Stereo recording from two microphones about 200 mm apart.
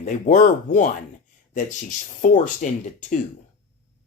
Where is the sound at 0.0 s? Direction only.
35° left (ahead or behind).